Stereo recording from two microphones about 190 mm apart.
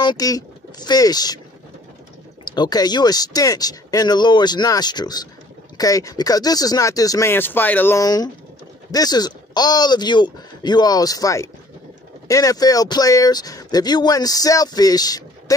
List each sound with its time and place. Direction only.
0.0 s speech: 20° left (ahead or behind)
2.5 s speech: 20° left (ahead or behind)